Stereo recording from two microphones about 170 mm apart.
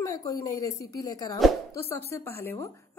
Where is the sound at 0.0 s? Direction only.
20° left (ahead or behind).